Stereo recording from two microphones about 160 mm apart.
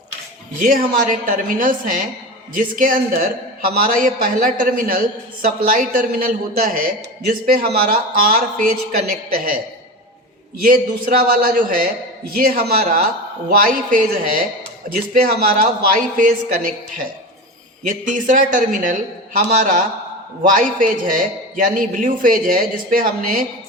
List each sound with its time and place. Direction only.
0.6 s a man's voice: 60° right (ahead or behind)
10.6 s a man's voice: 65° right (ahead or behind)
17.8 s a man's voice: 55° right (ahead or behind)